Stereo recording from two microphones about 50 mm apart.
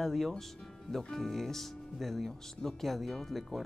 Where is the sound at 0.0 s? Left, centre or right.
Centre.